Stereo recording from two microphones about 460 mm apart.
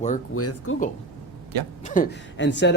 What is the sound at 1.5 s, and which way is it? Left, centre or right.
Speech, right.